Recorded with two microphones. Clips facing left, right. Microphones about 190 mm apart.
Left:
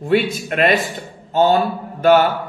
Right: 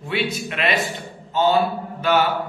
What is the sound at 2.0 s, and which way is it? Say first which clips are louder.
Mantra: left 7 dB; 50° left (ahead or behind).